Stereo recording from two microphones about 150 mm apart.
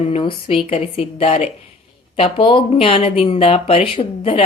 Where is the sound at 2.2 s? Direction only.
35° left (ahead or behind).